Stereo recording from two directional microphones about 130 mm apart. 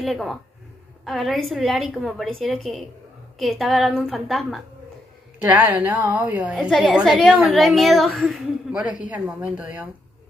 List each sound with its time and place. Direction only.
0.0 s a woman's voice: centre (ahead or behind)
5.4 s a woman's voice: 15° right (ahead or behind)